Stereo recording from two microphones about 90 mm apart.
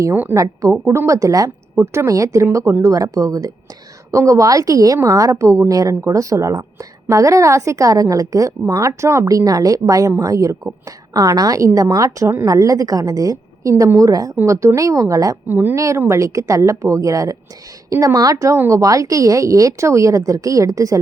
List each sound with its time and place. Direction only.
0.3 s a woman's voice: 40° right (ahead or behind)
15.4 s speech: 20° right (ahead or behind)
15.7 s a woman's voice: 35° right (ahead or behind)